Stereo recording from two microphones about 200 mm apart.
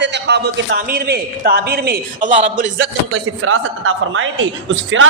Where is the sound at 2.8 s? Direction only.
80° right.